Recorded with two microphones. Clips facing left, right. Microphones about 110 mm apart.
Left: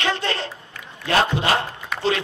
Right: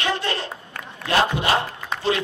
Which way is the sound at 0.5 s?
60° right (ahead or behind).